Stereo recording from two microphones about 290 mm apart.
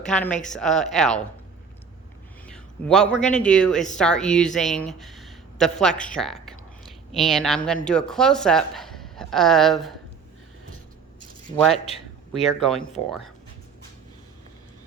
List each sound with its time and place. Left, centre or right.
0.0 s speech: centre
2.5 s a man's voice: centre
11.7 s a man's voice: left
12.4 s speech: centre